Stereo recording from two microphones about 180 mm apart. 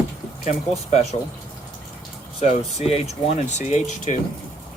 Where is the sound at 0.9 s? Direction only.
35° left (ahead or behind).